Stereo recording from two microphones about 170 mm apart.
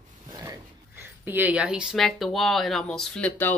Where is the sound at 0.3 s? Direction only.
20° right (ahead or behind).